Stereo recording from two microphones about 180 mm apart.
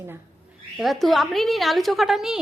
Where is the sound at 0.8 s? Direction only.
Centre (ahead or behind).